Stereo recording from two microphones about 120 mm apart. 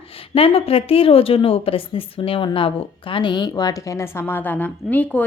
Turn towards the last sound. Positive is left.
turn(degrees=15)  # may be behind; listen again after turning